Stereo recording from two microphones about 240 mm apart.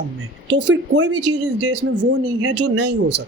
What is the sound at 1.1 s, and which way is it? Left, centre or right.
Speech, right.